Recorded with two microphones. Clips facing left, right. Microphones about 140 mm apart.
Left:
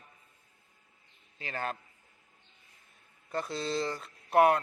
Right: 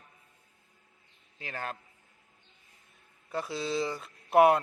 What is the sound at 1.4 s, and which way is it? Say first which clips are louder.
Speech: left 2 dB; 5° right (ahead or behind).